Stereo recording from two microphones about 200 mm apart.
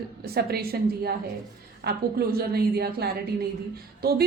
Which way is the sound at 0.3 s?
50° right (ahead or behind).